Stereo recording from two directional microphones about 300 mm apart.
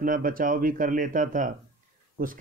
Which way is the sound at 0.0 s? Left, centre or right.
Right.